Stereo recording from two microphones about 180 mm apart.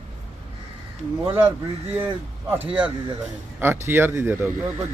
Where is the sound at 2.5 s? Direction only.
10° right (ahead or behind).